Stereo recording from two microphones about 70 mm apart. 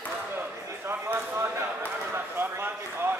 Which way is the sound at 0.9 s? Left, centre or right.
Right.